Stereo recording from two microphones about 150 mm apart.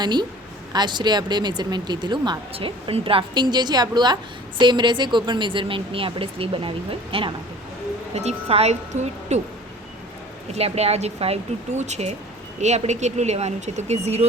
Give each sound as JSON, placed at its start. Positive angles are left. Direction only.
{"t": 0.0, "sound": "a woman's voice", "side_deg": -30}
{"t": 8.1, "sound": "speech", "side_deg": -45}
{"t": 10.5, "sound": "speech", "side_deg": -45}